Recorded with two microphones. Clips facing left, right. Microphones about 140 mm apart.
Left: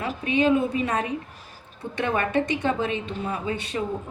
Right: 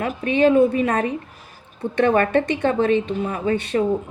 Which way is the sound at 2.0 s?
60° right (ahead or behind).